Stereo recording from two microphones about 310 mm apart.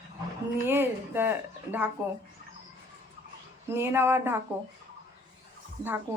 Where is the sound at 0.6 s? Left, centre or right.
Centre.